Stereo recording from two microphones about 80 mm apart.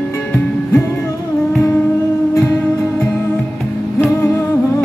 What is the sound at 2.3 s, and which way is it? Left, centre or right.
Music, left.